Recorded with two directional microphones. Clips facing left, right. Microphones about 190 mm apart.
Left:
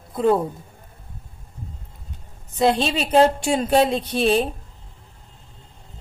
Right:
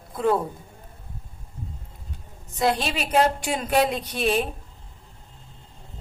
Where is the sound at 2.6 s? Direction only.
25° left (ahead or behind).